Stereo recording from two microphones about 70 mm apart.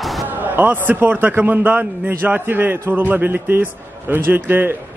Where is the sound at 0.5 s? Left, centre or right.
Right.